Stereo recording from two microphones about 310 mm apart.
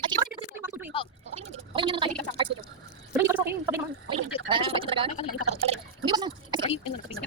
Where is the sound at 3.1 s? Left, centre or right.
Centre.